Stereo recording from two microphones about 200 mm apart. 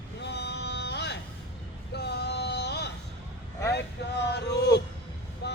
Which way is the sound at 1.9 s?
55° left (ahead or behind).